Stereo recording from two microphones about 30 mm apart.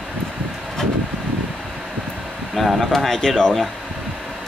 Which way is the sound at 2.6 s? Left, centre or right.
Centre.